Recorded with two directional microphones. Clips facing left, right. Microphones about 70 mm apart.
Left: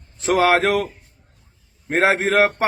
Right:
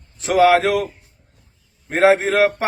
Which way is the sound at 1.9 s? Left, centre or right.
Left.